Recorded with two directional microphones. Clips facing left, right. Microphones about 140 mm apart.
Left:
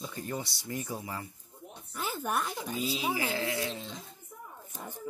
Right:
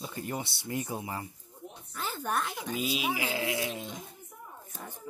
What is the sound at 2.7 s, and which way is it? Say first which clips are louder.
Speech: right 1 dB; 15° right (ahead or behind).